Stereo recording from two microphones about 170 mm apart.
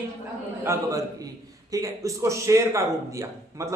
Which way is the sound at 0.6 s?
15° right (ahead or behind).